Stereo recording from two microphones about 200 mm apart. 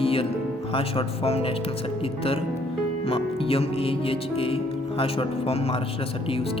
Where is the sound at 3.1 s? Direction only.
30° left (ahead or behind).